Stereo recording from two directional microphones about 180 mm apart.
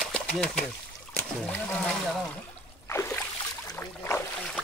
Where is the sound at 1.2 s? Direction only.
5° left (ahead or behind).